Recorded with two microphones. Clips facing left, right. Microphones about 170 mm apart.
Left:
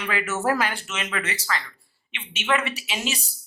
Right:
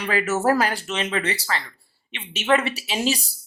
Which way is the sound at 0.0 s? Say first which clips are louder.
Right 4 dB; 35° right (ahead or behind).